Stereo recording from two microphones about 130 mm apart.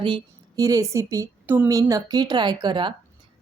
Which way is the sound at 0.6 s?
25° right (ahead or behind).